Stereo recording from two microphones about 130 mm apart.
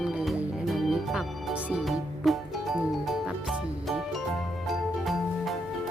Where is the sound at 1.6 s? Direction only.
5° right (ahead or behind).